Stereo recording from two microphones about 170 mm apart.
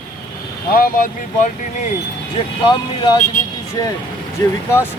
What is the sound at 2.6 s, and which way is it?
Speech, 25° left (ahead or behind).